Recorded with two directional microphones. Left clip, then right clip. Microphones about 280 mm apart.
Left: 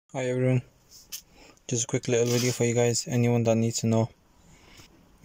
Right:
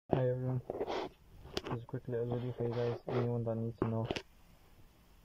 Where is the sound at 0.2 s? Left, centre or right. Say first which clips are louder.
Left 9 dB; left.